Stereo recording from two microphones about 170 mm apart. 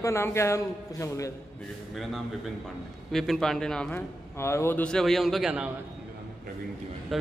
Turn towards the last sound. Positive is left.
turn(degrees=0)  # may be behind; listen again after turning